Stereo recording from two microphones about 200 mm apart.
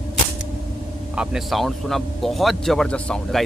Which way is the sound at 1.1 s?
5° right (ahead or behind).